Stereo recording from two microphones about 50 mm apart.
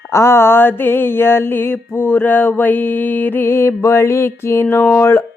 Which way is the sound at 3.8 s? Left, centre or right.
Left.